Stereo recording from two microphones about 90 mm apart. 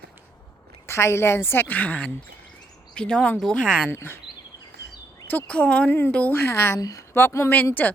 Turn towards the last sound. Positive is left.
turn(degrees=20)  # may be behind; listen again after turning